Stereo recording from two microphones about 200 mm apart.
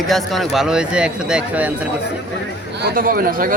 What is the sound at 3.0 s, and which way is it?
Speech, 45° right (ahead or behind).